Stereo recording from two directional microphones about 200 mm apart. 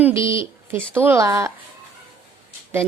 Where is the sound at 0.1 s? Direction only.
25° left (ahead or behind).